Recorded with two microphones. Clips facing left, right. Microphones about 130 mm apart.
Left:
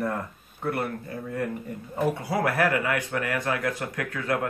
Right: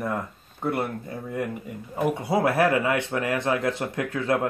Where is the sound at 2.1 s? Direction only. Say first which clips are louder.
Right 3 dB; 25° right (ahead or behind).